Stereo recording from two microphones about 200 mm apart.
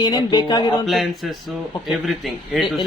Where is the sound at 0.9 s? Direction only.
Centre (ahead or behind).